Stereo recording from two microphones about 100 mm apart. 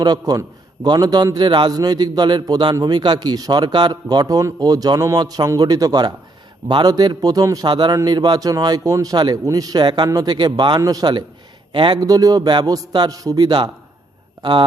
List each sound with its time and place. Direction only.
0.0 s a man's voice: 45° right (ahead or behind)
10.8 s a man's voice: 40° right (ahead or behind)
11.7 s a man's voice: 55° right (ahead or behind)
11.9 s a man's voice: 40° right (ahead or behind)